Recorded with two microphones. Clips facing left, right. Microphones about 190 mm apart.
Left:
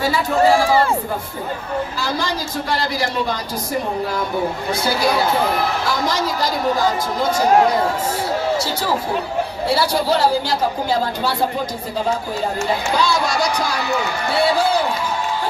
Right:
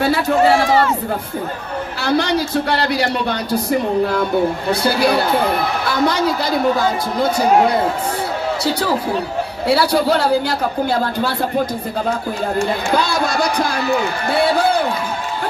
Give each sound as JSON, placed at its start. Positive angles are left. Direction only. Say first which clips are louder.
{"t": 0.0, "sound": "speech", "louder": "right 2 dB", "side_deg": -60}
{"t": 2.0, "sound": "speech", "louder": "right 6 dB", "side_deg": -65}
{"t": 9.6, "sound": "speech", "louder": "right 4 dB", "side_deg": -60}
{"t": 12.9, "sound": "speech", "louder": "right 1 dB", "side_deg": -55}